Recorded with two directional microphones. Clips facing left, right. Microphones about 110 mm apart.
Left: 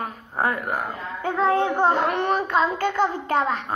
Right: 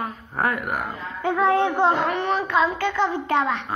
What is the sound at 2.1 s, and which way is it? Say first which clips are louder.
Child singing: even; 50° left (ahead or behind).